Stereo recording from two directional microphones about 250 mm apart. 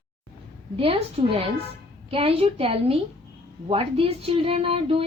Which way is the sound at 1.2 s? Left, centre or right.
Right.